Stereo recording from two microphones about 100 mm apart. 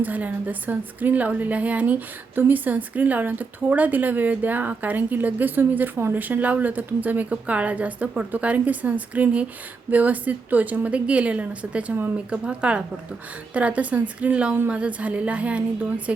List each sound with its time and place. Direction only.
0.0 s a woman's voice: 15° right (ahead or behind)